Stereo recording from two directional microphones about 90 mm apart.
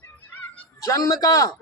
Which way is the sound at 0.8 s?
35° left (ahead or behind).